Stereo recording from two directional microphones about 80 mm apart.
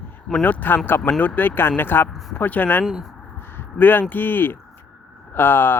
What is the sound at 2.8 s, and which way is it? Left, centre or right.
Speech, centre.